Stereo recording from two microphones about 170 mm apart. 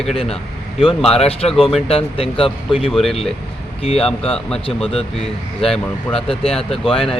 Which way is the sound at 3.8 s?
35° left (ahead or behind).